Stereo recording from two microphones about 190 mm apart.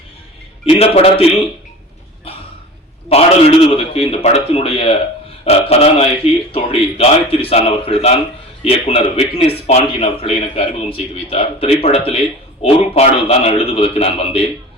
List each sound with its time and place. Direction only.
0.6 s a man's voice: 30° left (ahead or behind)
3.1 s a man's voice: 30° left (ahead or behind)